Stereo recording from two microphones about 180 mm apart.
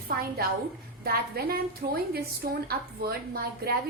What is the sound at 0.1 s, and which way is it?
A woman's voice, 60° right (ahead or behind).